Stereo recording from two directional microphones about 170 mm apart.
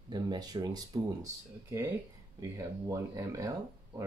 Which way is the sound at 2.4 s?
20° right (ahead or behind).